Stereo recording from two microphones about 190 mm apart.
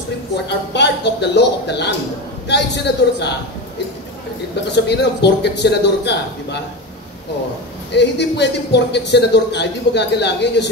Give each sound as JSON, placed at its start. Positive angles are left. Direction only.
{"t": 0.5, "sound": "a man's voice", "side_deg": 65}
{"t": 4.7, "sound": "a man's voice", "side_deg": 65}
{"t": 7.9, "sound": "a man's voice", "side_deg": 65}